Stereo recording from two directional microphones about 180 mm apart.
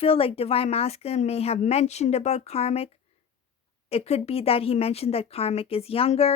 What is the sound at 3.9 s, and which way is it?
Speech, 35° left (ahead or behind).